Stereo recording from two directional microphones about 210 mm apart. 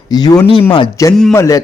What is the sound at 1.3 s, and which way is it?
Speech, 15° left (ahead or behind).